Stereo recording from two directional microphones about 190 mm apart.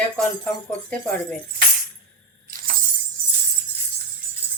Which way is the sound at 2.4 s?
45° right (ahead or behind).